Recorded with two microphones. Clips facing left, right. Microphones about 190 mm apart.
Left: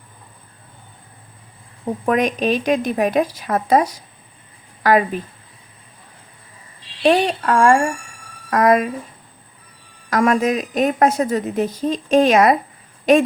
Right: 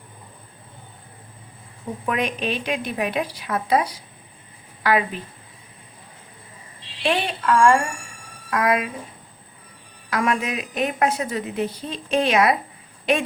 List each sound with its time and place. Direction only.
2.0 s a woman's voice: 40° left (ahead or behind)
7.0 s a woman's voice: 40° left (ahead or behind)
10.1 s a woman's voice: 45° left (ahead or behind)